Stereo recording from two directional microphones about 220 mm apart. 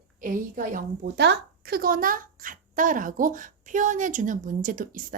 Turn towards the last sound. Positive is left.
turn(degrees=-40)  # may be behind; listen again after turning